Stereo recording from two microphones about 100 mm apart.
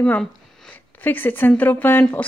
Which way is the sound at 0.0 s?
10° left (ahead or behind).